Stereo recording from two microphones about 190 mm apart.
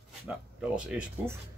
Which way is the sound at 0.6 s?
5° right (ahead or behind).